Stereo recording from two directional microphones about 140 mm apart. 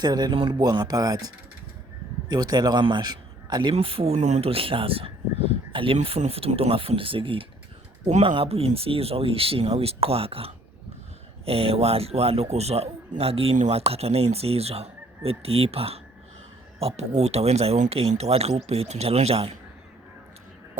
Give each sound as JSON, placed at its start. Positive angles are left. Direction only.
{"t": 0.0, "sound": "speech", "side_deg": -30}
{"t": 2.3, "sound": "a man's voice", "side_deg": -30}
{"t": 8.0, "sound": "speech", "side_deg": -50}